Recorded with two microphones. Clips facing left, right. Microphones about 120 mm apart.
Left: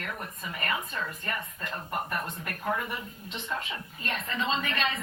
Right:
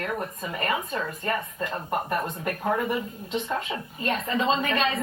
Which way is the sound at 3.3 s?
45° right (ahead or behind).